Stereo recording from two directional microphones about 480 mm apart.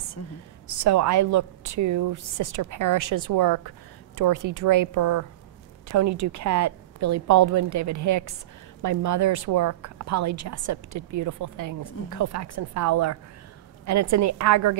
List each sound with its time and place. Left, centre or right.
0.2 s a woman's voice: left
0.8 s a woman's voice: right